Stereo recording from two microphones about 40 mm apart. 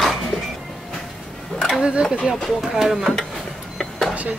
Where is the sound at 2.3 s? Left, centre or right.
Centre.